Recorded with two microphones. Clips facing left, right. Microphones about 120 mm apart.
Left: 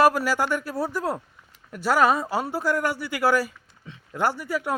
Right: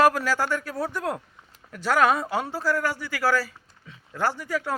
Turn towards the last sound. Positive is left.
turn(degrees=10)  # may be behind; listen again after turning